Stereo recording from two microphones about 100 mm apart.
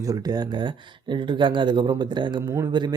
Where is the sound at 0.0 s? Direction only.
40° right (ahead or behind).